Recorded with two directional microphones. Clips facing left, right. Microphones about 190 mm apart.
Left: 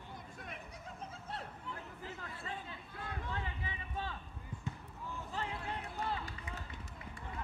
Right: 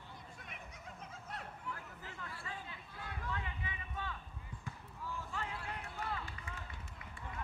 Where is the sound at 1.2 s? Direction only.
30° left (ahead or behind).